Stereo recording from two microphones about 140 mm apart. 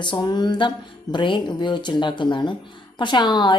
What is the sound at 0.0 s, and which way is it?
Speech, 35° left (ahead or behind).